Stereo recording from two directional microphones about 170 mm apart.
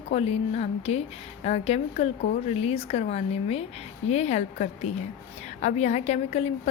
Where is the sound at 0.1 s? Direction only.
35° left (ahead or behind).